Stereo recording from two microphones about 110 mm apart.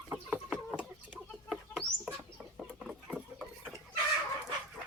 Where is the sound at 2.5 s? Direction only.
5° right (ahead or behind).